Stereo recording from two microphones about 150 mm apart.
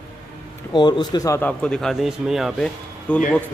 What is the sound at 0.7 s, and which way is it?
Speech, 30° left (ahead or behind).